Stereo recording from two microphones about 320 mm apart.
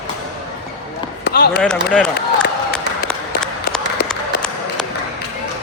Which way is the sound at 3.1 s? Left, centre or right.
Centre.